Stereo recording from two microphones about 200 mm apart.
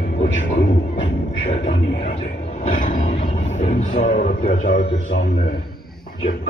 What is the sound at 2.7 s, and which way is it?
Speech, 40° left (ahead or behind).